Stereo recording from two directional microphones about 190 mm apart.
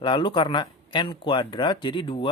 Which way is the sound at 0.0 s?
25° left (ahead or behind).